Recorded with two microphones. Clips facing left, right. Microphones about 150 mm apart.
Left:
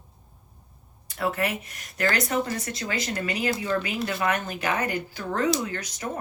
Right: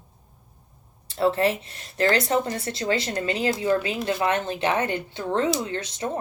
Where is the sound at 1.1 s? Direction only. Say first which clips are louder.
Right 6 dB; 30° right (ahead or behind).